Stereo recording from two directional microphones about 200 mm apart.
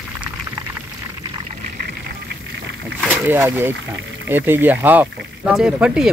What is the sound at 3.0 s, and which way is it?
Speech, 10° right (ahead or behind).